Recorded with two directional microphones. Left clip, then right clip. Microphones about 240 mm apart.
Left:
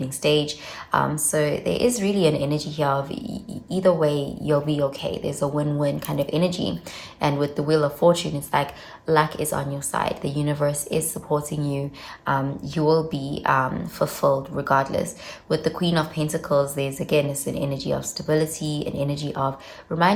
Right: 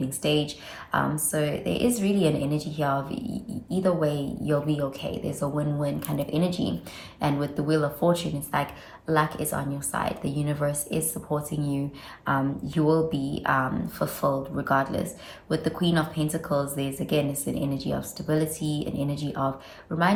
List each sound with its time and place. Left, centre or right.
0.2 s a woman's voice: left